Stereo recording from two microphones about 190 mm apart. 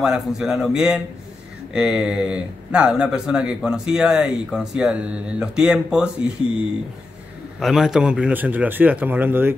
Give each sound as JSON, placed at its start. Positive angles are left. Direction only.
{"t": 0.0, "sound": "speech", "side_deg": 0}